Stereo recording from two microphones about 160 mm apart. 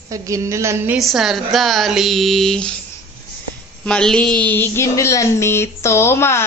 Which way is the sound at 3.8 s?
5° left (ahead or behind).